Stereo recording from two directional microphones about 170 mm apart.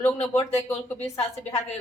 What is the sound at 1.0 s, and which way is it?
Speech, 40° left (ahead or behind).